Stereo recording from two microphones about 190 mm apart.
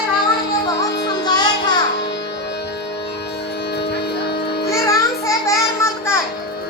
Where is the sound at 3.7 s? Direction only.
60° left (ahead or behind).